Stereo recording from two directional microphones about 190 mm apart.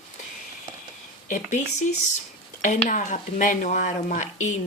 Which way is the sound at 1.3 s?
40° left (ahead or behind).